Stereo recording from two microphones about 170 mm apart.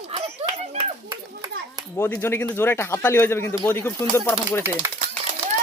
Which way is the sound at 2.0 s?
15° left (ahead or behind).